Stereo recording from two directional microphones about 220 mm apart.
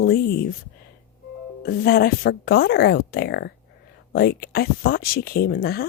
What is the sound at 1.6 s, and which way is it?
Speech, 45° left (ahead or behind).